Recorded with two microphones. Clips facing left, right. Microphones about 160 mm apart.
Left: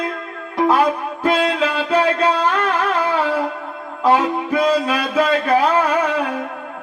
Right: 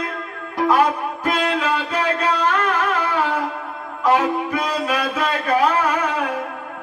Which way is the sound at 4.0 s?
30° left (ahead or behind).